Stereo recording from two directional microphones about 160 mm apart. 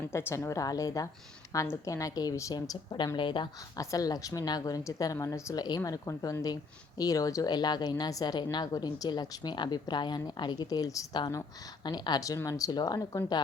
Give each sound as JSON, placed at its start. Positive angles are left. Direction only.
{"t": 0.1, "sound": "a woman's voice", "side_deg": 15}